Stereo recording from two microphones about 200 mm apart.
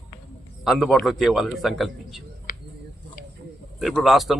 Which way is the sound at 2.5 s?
45° left (ahead or behind).